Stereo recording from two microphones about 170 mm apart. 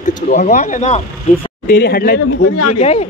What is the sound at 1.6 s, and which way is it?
Speech, 70° left (ahead or behind).